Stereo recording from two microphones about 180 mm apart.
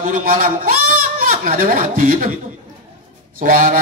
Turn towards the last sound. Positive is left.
turn(degrees=-50)  # may be behind; listen again after turning